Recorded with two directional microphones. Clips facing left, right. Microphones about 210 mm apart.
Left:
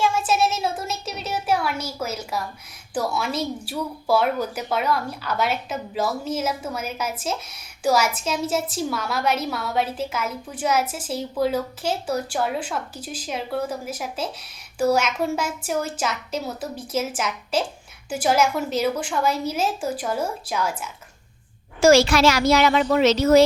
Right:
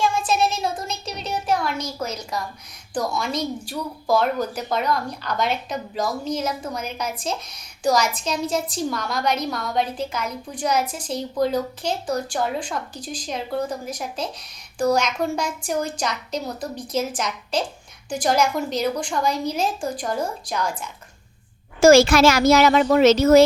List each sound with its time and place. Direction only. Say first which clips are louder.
0.0 s a woman's voice: even; 5° left (ahead or behind)
21.8 s a child's voice: right 3 dB; 45° right (ahead or behind)